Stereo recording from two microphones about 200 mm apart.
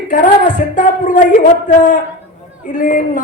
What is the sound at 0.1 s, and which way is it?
A man's voice, 40° left (ahead or behind).